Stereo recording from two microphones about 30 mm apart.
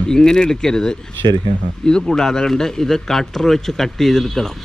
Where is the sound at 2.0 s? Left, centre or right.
Centre.